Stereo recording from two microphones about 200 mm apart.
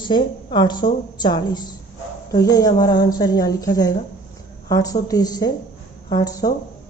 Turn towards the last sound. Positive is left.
turn(degrees=20)  # may be behind; listen again after turning